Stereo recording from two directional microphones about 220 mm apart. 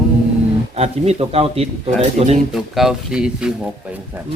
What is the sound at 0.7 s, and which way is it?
Speech, 30° right (ahead or behind).